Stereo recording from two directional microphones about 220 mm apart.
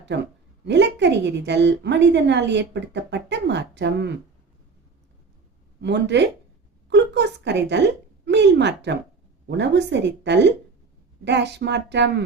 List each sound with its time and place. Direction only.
0.1 s a woman's voice: 50° right (ahead or behind)
5.8 s a woman's voice: 50° right (ahead or behind)